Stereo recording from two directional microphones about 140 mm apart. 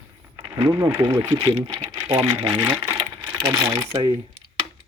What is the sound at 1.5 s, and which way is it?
Speech, 45° right (ahead or behind).